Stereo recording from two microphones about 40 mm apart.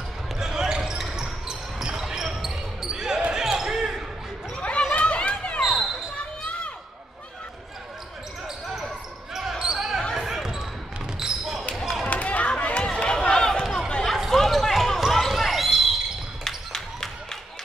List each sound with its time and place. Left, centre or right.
0.4 s basketball bounce: centre
4.6 s chatter: left
5.6 s basketball bounce: centre
9.3 s basketball bounce: centre
12.1 s run: left; by 14.1 s centre
14.1 s basketball bounce: centre
16.4 s a sound: centre